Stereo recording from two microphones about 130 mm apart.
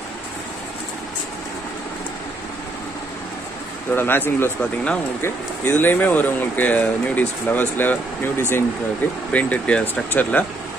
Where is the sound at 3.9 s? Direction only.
15° left (ahead or behind).